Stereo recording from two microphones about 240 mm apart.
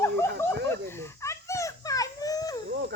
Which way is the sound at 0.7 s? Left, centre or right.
Centre.